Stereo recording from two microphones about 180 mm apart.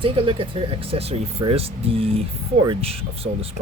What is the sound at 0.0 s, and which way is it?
Speech, 30° right (ahead or behind).